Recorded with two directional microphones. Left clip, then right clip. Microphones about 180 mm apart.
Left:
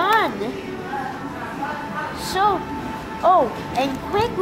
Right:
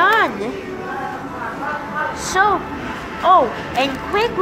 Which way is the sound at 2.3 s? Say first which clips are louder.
Right 3 dB; 5° right (ahead or behind).